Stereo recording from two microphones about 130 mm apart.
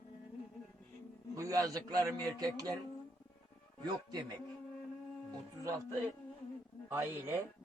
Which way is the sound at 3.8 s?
35° right (ahead or behind).